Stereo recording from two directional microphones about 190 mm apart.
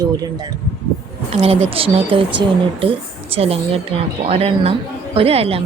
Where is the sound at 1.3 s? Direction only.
30° right (ahead or behind).